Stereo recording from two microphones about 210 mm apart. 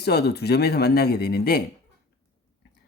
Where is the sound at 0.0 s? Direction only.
50° left (ahead or behind).